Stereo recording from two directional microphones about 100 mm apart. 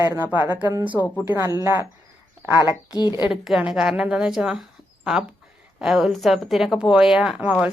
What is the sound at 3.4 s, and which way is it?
A woman's voice, 5° right (ahead or behind).